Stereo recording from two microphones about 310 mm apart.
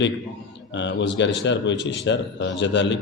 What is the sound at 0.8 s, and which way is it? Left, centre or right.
Speech, left.